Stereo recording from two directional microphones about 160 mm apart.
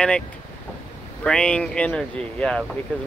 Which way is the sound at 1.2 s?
5° left (ahead or behind).